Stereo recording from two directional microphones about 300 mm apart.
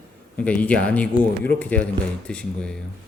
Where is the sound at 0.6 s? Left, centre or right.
Centre.